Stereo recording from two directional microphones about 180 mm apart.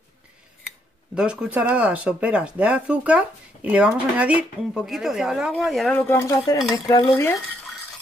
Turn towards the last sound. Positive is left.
turn(degrees=15)  # may be behind; listen again after turning